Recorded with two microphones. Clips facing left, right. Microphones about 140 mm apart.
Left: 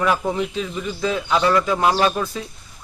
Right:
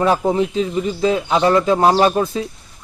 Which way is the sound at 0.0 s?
30° right (ahead or behind).